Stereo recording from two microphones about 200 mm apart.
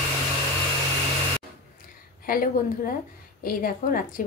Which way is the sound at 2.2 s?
45° left (ahead or behind).